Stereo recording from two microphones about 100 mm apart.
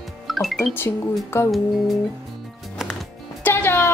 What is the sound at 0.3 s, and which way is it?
Music, centre (ahead or behind).